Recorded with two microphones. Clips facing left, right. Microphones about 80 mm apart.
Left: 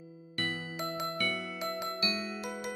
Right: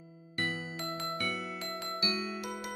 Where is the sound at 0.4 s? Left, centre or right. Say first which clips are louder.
Even; centre.